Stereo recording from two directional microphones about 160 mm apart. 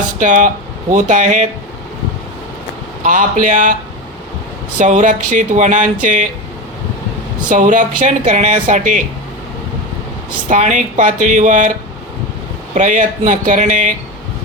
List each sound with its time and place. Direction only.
0.2 s speech: 50° right (ahead or behind)
3.0 s speech: 55° right (ahead or behind)
4.8 s speech: 50° right (ahead or behind)
7.5 s speech: 55° right (ahead or behind)
10.5 s speech: 50° right (ahead or behind)
12.7 s speech: 50° right (ahead or behind)